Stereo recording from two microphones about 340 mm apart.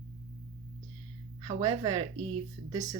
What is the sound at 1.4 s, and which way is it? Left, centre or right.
Speech, centre.